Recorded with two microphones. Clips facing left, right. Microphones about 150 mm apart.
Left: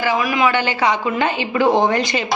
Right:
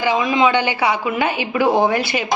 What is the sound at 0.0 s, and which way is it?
A woman's voice, 20° right (ahead or behind).